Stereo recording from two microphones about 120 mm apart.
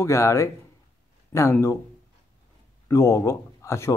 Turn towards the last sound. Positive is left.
turn(degrees=25)  # may be behind; listen again after turning